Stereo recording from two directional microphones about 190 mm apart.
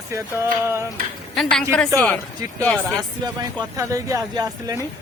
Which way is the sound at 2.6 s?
5° left (ahead or behind).